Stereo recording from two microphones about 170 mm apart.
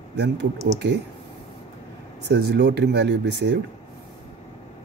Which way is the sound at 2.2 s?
80° right.